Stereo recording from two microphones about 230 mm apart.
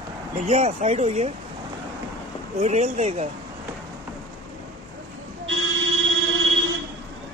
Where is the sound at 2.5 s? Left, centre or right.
Right.